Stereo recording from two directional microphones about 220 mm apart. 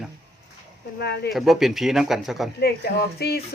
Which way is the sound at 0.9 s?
50° left (ahead or behind).